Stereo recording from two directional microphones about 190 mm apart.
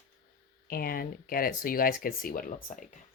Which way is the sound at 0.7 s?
50° left (ahead or behind).